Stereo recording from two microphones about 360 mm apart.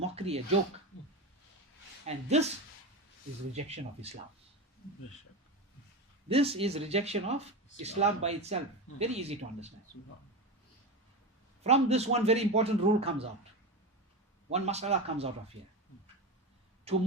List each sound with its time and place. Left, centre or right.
0.2 s a man's voice: centre
2.0 s a man's voice: centre
3.5 s a man's voice: centre
6.2 s a man's voice: centre
11.6 s a man's voice: centre
14.5 s a man's voice: centre
16.9 s speech: centre